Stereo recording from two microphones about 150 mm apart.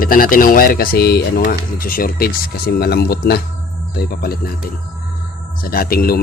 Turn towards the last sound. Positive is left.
turn(degrees=85)